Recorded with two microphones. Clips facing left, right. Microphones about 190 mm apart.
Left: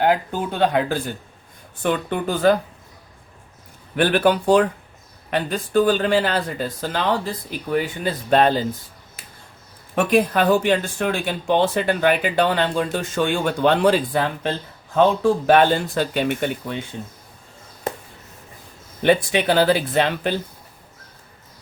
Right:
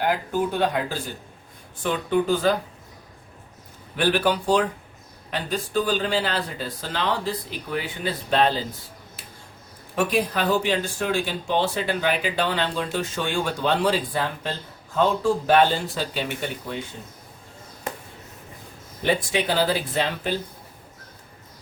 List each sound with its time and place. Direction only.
0.7 s speech: 60° left (ahead or behind)
3.9 s speech: 55° left (ahead or behind)
9.9 s speech: 50° left (ahead or behind)
19.0 s speech: 65° left (ahead or behind)